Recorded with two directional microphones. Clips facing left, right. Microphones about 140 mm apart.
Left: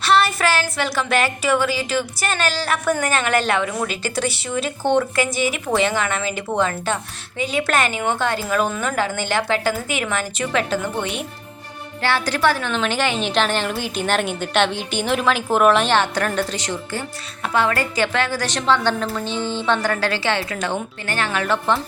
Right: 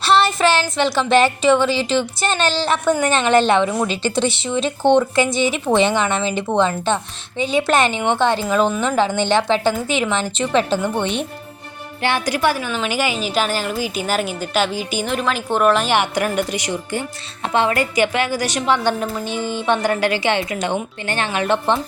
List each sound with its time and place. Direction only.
0.0 s a woman's voice: 30° right (ahead or behind)
12.0 s a woman's voice: 15° right (ahead or behind); by 15.9 s centre (ahead or behind)
15.9 s a woman's voice: 15° right (ahead or behind)